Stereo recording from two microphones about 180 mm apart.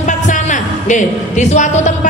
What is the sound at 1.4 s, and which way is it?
Speech, 45° left (ahead or behind).